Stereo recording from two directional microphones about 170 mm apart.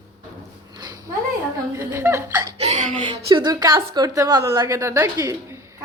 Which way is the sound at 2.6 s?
40° right (ahead or behind).